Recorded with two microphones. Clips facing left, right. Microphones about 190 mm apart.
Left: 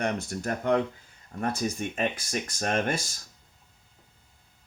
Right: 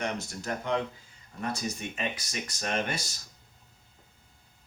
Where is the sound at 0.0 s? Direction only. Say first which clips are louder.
Left 4 dB; 55° left (ahead or behind).